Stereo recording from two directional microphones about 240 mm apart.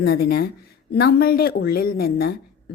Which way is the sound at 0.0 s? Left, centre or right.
Left.